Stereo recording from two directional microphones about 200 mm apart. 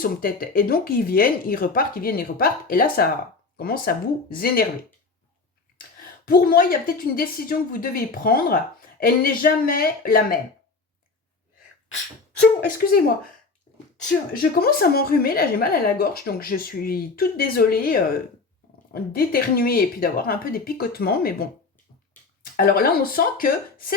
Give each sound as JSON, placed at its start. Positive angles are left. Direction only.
{"t": 0.0, "sound": "a woman's voice", "side_deg": 45}
{"t": 5.7, "sound": "a woman's voice", "side_deg": 45}
{"t": 12.4, "sound": "a woman's voice", "side_deg": 50}
{"t": 13.7, "sound": "sneeze", "side_deg": 30}
{"t": 14.6, "sound": "a woman's voice", "side_deg": 50}
{"t": 22.5, "sound": "a woman's voice", "side_deg": 45}